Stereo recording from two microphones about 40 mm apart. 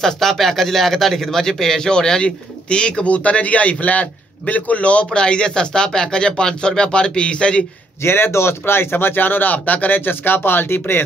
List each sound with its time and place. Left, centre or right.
0.0 s a man's voice: centre; by 7.6 s left
8.0 s speech: left